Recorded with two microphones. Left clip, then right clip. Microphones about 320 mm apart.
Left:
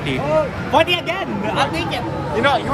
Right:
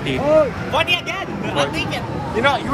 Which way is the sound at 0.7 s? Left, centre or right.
Left.